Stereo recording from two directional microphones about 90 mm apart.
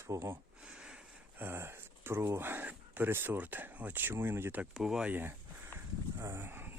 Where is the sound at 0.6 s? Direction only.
10° right (ahead or behind).